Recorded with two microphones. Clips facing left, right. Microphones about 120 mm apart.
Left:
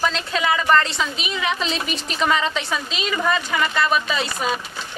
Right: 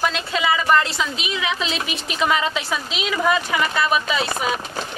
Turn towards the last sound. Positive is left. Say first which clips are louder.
# even
turn(degrees=-5)  # may be behind; listen again after turning